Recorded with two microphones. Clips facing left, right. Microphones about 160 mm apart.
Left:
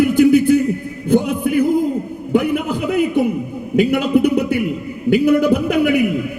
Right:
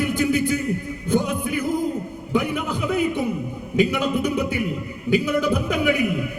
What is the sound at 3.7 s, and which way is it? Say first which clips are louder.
A man's voice: left 6 dB; 60° left (ahead or behind).